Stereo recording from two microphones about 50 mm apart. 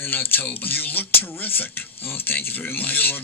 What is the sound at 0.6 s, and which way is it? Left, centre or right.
Speech, left.